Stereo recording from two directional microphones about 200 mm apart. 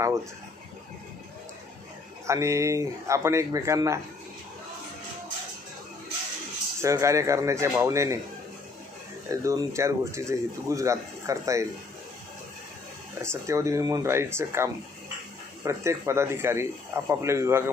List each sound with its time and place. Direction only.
2.2 s speech: 15° right (ahead or behind)
6.8 s speech: 15° right (ahead or behind)
9.3 s speech: 15° right (ahead or behind)
13.2 s speech: 15° right (ahead or behind)